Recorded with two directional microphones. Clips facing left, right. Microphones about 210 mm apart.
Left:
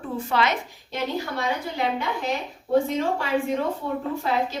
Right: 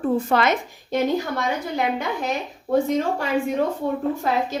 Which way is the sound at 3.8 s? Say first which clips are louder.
Right 4 dB; 45° right (ahead or behind).